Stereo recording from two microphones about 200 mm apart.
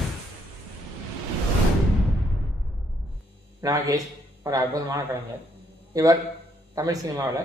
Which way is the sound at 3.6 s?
15° right (ahead or behind).